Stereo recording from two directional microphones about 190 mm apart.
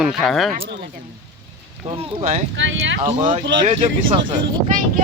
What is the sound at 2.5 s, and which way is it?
Speech, 80° right.